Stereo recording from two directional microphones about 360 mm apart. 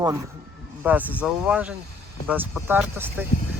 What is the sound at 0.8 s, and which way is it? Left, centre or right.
Speech, centre.